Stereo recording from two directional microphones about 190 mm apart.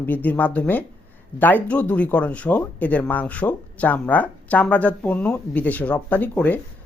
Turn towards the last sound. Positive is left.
turn(degrees=10)  # may be behind; listen again after turning